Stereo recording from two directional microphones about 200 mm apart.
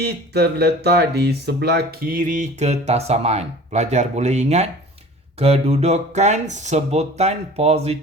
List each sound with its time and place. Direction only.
0.0 s speech: 55° right (ahead or behind); by 7.9 s 30° right (ahead or behind)